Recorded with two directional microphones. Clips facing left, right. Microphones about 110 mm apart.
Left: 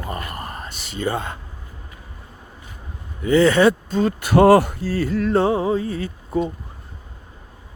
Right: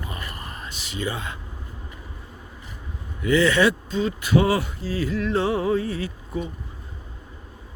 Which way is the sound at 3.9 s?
55° left (ahead or behind).